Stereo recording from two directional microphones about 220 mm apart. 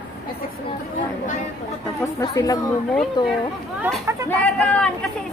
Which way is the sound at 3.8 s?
10° right (ahead or behind).